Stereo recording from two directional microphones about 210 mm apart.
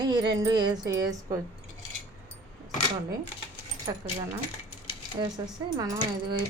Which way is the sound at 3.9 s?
20° right (ahead or behind).